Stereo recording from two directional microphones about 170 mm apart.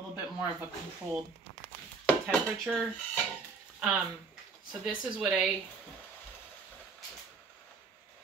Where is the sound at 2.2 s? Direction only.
5° right (ahead or behind).